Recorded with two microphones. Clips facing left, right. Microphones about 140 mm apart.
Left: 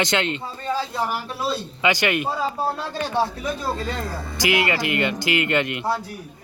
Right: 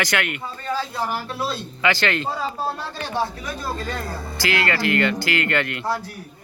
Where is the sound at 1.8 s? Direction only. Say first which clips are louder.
Even; 15° left (ahead or behind).